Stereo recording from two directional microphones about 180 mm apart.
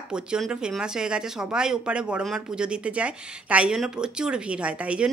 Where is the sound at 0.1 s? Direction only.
5° right (ahead or behind).